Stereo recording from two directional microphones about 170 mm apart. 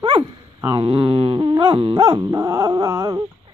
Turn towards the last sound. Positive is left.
turn(degrees=-20)  # may be behind; listen again after turning